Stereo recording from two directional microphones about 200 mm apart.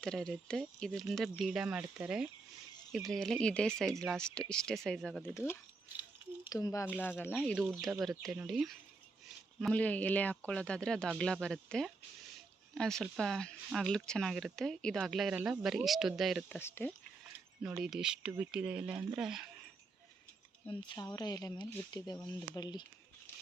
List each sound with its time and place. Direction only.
0.0 s speech: 5° left (ahead or behind)
7.3 s speech: 5° right (ahead or behind)
16.6 s speech: 10° left (ahead or behind)
17.6 s speech: 5° right (ahead or behind)
20.7 s speech: 20° left (ahead or behind)